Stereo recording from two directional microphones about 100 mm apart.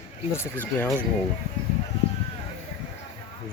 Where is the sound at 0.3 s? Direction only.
20° left (ahead or behind).